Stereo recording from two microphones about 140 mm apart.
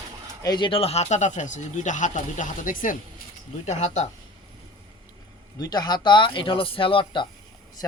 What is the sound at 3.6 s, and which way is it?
Speech, 55° left (ahead or behind).